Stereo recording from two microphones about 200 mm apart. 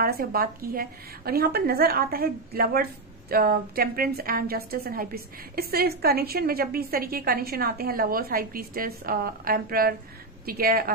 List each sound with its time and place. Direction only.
0.0 s a woman's voice: 50° right (ahead or behind)